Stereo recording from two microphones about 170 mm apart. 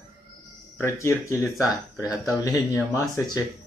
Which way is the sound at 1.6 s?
20° left (ahead or behind).